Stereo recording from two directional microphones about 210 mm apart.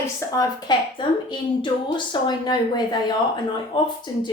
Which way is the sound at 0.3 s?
20° left (ahead or behind).